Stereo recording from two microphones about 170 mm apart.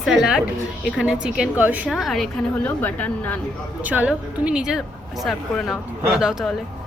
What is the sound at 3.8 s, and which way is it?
A woman's voice, 10° right (ahead or behind).